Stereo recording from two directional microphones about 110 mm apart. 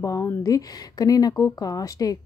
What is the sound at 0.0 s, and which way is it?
Speech, 30° left (ahead or behind).